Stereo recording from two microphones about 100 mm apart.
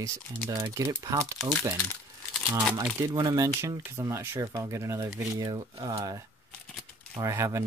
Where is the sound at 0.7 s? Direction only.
30° right (ahead or behind).